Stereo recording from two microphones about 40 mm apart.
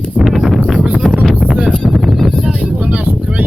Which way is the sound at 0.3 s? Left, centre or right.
Centre.